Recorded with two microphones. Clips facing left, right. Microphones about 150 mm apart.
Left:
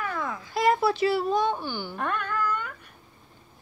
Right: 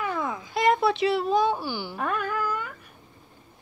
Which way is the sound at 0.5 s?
Centre (ahead or behind).